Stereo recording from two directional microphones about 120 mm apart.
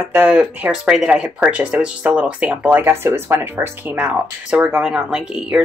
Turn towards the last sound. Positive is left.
turn(degrees=-5)  # may be behind; listen again after turning